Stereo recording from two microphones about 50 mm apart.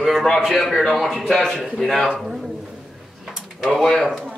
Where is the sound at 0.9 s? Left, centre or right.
Centre.